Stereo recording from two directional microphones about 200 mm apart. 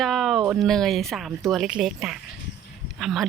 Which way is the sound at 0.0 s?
Centre (ahead or behind).